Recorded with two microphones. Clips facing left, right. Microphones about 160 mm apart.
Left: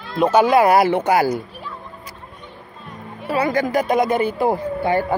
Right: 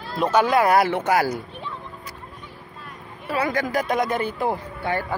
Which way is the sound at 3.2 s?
Centre (ahead or behind).